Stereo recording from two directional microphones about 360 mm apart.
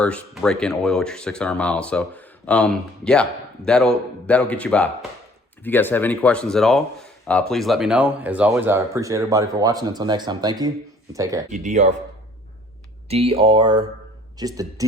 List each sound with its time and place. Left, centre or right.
0.0 s speech: centre
11.5 s speech: centre
13.1 s speech: centre